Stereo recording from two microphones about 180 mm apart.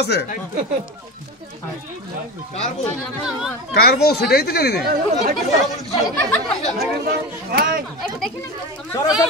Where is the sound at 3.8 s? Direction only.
60° left (ahead or behind).